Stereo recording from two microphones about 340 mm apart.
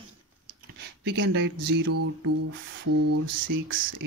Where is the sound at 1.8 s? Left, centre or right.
Right.